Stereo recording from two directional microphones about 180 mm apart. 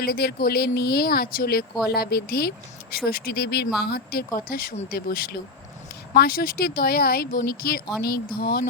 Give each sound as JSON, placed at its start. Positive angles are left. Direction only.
{"t": 0.0, "sound": "speech", "side_deg": 60}